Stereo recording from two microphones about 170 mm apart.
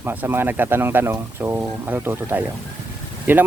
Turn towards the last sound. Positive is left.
turn(degrees=-10)  # may be behind; listen again after turning